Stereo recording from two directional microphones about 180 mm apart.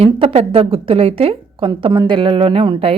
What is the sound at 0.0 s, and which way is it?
A woman's voice, 30° right (ahead or behind).